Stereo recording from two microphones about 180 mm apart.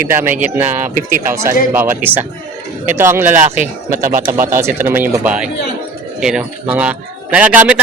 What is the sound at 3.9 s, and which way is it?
Speech, 50° right (ahead or behind).